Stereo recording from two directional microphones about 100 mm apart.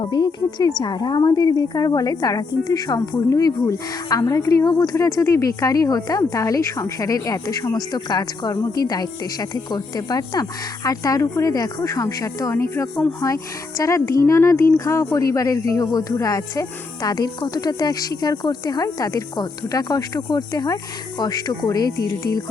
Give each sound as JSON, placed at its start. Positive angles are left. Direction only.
{"t": 0.0, "sound": "a woman's voice", "side_deg": 50}